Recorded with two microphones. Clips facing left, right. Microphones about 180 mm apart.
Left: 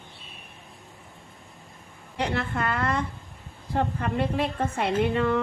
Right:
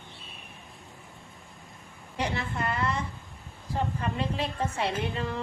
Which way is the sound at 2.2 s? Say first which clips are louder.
Left 3 dB; 55° left (ahead or behind).